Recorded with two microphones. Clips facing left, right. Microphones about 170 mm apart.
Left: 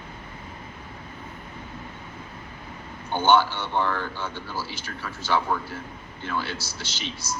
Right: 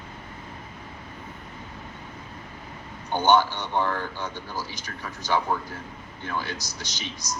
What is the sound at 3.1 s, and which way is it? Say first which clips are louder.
Speech: even; 15° right (ahead or behind).